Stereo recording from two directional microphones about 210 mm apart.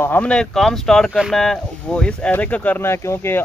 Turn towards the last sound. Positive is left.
turn(degrees=10)  # may be behind; listen again after turning